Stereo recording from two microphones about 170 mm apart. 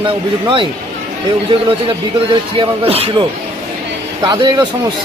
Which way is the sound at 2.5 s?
35° right (ahead or behind).